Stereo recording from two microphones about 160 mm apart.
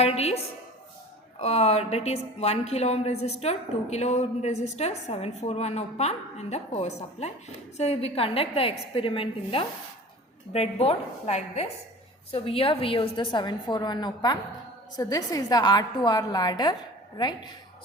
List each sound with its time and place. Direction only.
0.0 s a woman's voice: 40° left (ahead or behind)